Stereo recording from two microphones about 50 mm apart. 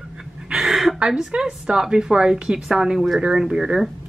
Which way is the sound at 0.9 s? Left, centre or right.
Centre.